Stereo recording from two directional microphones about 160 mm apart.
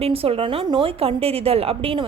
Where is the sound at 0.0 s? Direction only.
35° right (ahead or behind).